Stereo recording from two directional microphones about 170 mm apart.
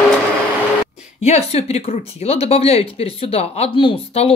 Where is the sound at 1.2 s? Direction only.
40° left (ahead or behind).